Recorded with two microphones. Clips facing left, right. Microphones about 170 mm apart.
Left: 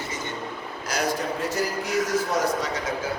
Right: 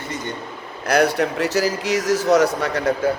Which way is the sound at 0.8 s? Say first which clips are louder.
Right 9 dB; 65° right (ahead or behind).